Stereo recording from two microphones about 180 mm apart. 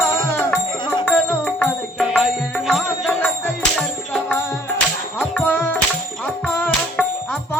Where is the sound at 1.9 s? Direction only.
5° right (ahead or behind).